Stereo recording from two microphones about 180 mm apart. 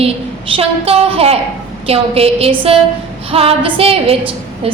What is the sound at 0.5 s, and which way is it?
A woman's voice, 35° right (ahead or behind).